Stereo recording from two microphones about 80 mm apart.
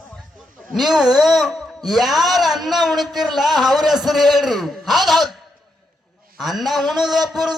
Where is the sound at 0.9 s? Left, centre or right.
Centre.